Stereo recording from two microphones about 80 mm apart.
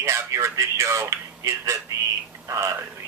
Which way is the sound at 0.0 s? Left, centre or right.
Right.